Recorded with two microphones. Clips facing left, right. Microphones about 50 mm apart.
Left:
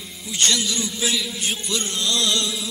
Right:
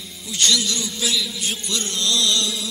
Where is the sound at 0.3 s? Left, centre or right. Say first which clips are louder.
Right 1 dB; left; by 2.6 s centre.